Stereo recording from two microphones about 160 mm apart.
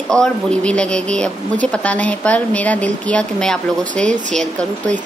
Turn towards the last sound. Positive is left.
turn(degrees=5)  # may be behind; listen again after turning